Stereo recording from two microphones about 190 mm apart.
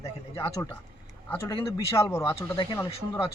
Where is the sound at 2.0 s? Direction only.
15° left (ahead or behind).